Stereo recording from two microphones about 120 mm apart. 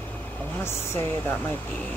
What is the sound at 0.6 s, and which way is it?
Speech, 20° left (ahead or behind).